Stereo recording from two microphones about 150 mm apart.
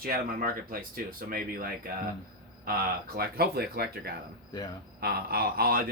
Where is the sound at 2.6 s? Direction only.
90° right.